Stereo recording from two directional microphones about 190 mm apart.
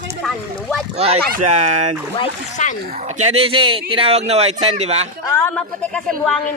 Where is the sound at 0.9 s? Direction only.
30° right (ahead or behind).